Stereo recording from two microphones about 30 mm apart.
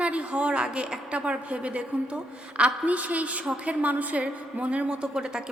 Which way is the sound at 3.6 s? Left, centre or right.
Right.